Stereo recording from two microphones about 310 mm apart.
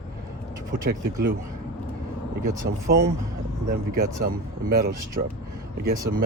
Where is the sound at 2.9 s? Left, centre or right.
Right.